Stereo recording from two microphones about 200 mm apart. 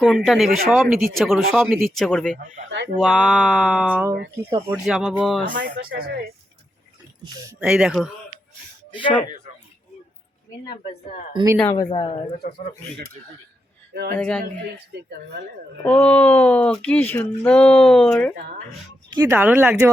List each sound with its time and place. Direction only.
0.0 s speech: centre (ahead or behind)
4.9 s speech: 5° right (ahead or behind)
5.5 s speech: 55° right (ahead or behind)
7.6 s speech: 5° right (ahead or behind)
8.9 s speech: 25° left (ahead or behind)
11.7 s speech: 20° left (ahead or behind)
12.4 s speech: 50° left (ahead or behind)
13.9 s speech: 50° right (ahead or behind)
14.2 s speech: 5° left (ahead or behind)
15.8 s speech: 5° left (ahead or behind)
19.1 s speech: 10° right (ahead or behind)